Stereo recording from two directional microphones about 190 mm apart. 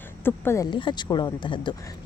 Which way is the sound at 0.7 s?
25° left (ahead or behind).